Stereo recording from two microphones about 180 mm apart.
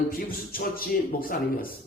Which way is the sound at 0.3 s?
55° left (ahead or behind).